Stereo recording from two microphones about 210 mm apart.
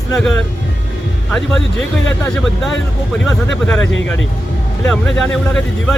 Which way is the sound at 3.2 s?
Centre (ahead or behind).